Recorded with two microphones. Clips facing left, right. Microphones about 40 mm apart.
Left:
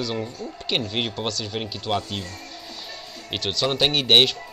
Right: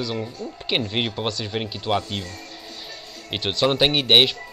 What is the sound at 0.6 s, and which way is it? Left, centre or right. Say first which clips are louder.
Speech: right 2 dB; centre.